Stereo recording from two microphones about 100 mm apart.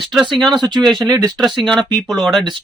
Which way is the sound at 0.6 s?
45° right (ahead or behind).